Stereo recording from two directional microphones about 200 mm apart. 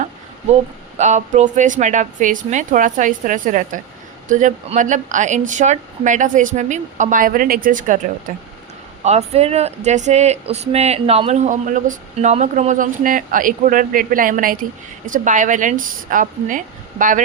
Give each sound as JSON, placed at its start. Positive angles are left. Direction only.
{"t": 0.9, "sound": "speech", "side_deg": -35}
{"t": 9.0, "sound": "speech", "side_deg": -30}